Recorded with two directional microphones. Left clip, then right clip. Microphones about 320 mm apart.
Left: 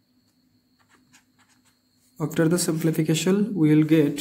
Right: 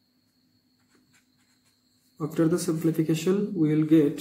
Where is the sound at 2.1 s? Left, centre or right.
Left.